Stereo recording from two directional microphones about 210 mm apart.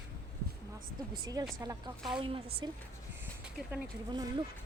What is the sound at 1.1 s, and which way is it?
A woman's voice, 20° right (ahead or behind).